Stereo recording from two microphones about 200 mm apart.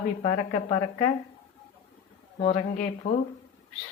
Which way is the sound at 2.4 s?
30° left (ahead or behind).